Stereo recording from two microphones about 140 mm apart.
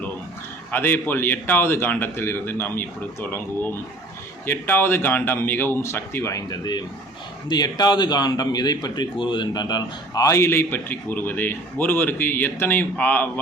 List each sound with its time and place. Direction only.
0.7 s a man's voice: 15° left (ahead or behind)